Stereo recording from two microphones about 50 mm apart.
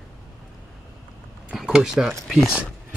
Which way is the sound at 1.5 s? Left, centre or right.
Centre.